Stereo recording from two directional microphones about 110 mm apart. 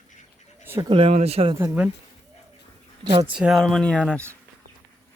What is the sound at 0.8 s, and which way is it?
Speech, 55° right (ahead or behind).